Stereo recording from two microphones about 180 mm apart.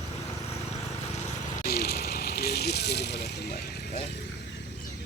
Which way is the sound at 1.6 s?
60° left (ahead or behind).